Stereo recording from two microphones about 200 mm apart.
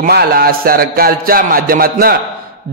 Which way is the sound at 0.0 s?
50° right (ahead or behind).